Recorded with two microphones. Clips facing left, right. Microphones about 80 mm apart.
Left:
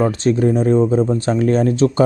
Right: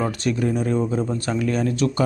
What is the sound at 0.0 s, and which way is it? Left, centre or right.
Speech, left.